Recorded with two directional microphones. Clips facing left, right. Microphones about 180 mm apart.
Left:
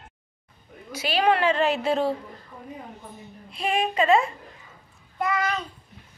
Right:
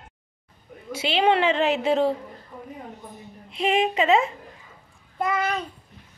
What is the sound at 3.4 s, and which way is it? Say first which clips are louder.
Speech: right 3 dB; 20° right (ahead or behind).